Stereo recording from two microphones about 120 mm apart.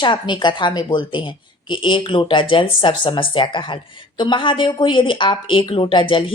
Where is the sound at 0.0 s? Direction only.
40° left (ahead or behind).